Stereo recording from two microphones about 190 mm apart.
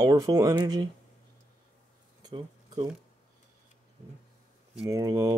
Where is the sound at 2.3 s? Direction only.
25° right (ahead or behind).